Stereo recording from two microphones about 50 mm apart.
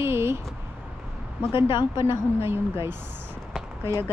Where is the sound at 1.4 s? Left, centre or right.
Right.